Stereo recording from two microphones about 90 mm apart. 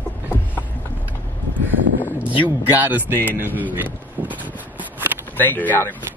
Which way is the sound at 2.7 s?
20° right (ahead or behind).